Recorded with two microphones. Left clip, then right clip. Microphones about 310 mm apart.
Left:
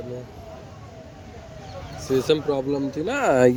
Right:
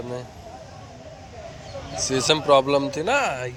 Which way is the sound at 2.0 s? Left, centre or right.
Centre.